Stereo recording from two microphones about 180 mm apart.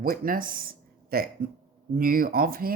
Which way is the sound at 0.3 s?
50° right (ahead or behind).